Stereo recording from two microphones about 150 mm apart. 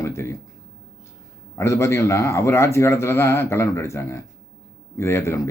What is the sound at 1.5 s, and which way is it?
A man's voice, 20° left (ahead or behind).